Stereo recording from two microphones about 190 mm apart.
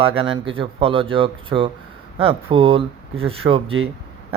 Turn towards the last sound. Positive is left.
turn(degrees=-30)  # may be behind; listen again after turning